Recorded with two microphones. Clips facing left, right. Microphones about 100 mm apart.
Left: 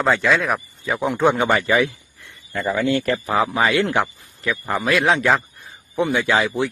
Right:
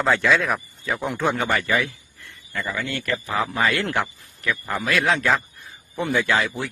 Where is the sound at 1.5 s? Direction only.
30° left (ahead or behind).